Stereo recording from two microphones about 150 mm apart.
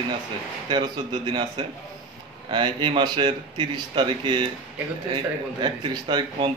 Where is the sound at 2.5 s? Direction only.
30° right (ahead or behind).